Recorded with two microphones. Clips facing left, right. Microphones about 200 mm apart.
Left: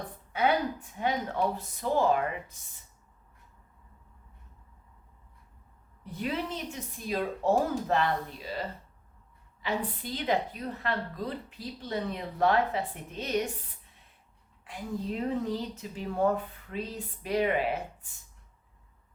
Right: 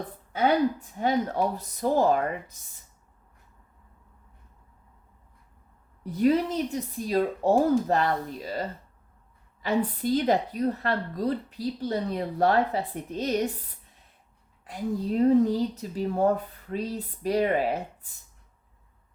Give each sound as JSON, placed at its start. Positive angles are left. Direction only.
{"t": 0.9, "sound": "a woman's voice", "side_deg": -40}
{"t": 6.0, "sound": "a woman's voice", "side_deg": -40}
{"t": 14.6, "sound": "a woman's voice", "side_deg": -40}